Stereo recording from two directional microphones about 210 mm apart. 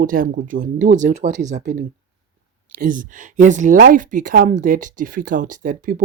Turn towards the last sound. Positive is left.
turn(degrees=-40)  # may be behind; listen again after turning